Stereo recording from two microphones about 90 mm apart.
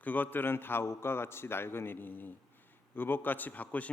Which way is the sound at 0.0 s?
20° left (ahead or behind).